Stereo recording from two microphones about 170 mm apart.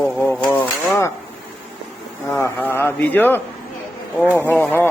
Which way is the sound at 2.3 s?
10° left (ahead or behind).